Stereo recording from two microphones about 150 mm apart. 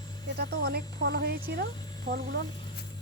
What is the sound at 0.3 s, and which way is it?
Speech, 90° right.